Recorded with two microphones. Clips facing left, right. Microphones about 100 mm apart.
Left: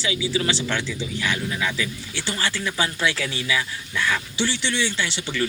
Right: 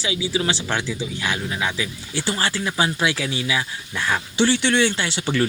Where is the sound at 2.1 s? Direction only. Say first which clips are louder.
Right 4 dB; 40° right (ahead or behind).